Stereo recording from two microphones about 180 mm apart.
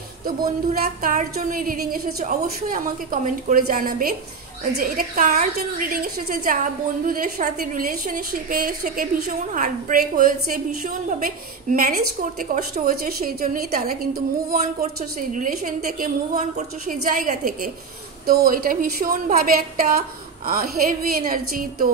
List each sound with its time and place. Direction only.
0.4 s a woman's voice: 55° right (ahead or behind)
14.5 s a woman's voice: 40° right (ahead or behind)